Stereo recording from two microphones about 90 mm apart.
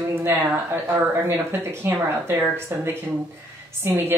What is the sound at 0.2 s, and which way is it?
Speech, 25° right (ahead or behind).